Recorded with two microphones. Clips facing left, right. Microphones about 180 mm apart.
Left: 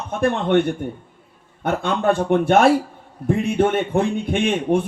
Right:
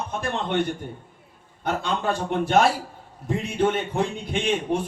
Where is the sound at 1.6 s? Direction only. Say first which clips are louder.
Left 6 dB; 55° left (ahead or behind).